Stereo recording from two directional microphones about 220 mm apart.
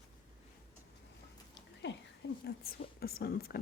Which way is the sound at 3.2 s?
45° left (ahead or behind).